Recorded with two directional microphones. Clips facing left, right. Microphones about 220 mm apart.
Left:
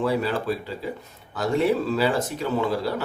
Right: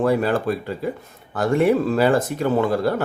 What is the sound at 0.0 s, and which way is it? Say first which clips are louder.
Speech: right 5 dB; 50° right (ahead or behind).